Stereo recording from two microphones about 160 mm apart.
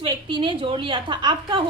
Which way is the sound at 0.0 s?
30° right (ahead or behind).